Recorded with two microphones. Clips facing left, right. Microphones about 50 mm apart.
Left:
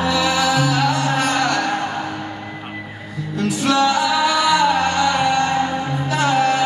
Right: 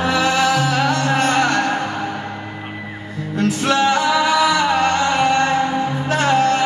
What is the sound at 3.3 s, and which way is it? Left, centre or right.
Music, right.